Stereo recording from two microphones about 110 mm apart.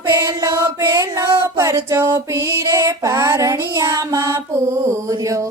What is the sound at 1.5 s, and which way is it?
Music, 25° right (ahead or behind).